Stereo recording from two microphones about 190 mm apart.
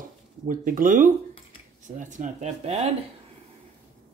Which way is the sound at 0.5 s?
45° right (ahead or behind).